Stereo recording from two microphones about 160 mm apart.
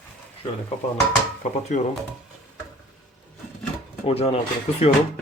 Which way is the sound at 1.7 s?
50° left (ahead or behind).